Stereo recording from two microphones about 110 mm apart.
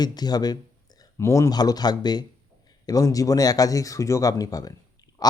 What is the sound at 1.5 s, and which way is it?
Speech, 35° left (ahead or behind).